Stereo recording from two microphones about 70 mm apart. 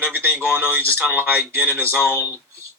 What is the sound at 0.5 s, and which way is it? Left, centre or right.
Speech, right.